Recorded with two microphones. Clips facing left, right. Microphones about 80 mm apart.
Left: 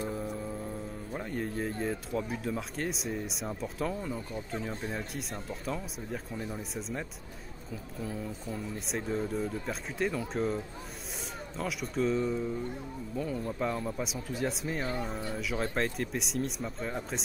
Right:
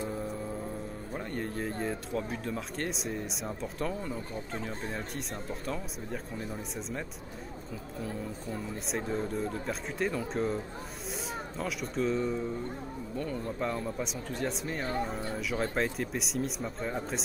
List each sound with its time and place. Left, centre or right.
1.1 s speech: centre